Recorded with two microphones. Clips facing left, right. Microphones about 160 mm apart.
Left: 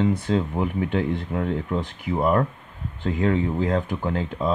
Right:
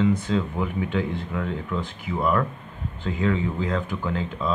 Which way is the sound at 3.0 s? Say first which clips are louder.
Left 2 dB; 50° left (ahead or behind).